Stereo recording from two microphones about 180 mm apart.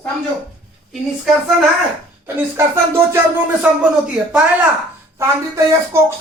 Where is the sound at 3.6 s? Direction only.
5° right (ahead or behind).